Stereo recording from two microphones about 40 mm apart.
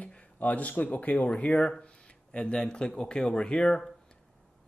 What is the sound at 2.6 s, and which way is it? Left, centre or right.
Speech, centre.